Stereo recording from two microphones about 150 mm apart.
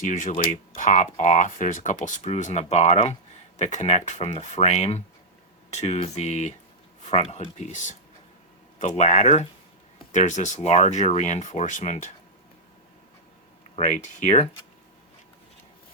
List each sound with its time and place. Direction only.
0.0 s speech: 60° left (ahead or behind)
13.7 s speech: 55° left (ahead or behind)